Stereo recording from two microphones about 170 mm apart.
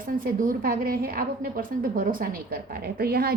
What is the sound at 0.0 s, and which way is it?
A woman's voice, 55° right (ahead or behind).